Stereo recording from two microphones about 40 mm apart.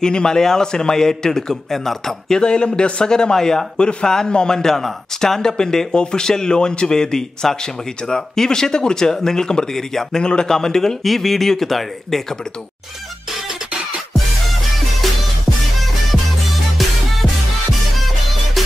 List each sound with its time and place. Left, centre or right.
0.0 s a man's voice: centre
15.0 s music: centre
16.8 s music: centre